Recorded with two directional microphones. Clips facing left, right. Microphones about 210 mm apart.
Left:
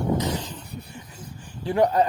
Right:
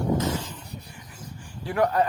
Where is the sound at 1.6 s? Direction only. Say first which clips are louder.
Left 3 dB; 20° left (ahead or behind).